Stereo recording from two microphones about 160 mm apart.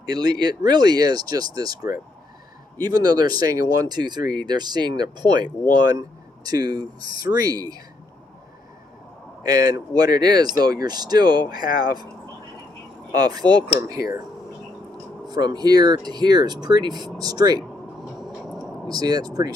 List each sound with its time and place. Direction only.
0.0 s speech: 25° right (ahead or behind)
9.4 s speech: 25° right (ahead or behind)
13.1 s speech: 25° right (ahead or behind)
15.3 s speech: 25° right (ahead or behind)
18.6 s speech: 25° right (ahead or behind)